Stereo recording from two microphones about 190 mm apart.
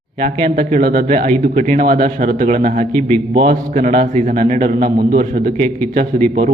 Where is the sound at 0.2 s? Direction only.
50° right (ahead or behind).